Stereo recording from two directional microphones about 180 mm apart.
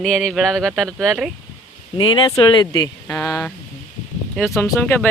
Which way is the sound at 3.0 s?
5° left (ahead or behind).